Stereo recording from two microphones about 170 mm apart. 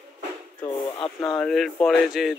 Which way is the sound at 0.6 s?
30° left (ahead or behind).